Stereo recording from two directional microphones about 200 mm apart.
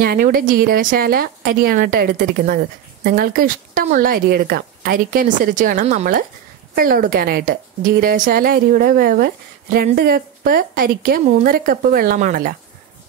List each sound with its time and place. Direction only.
0.0 s a woman's voice: 45° right (ahead or behind)